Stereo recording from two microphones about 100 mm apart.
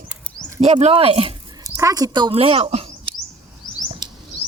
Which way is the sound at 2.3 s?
70° right (ahead or behind).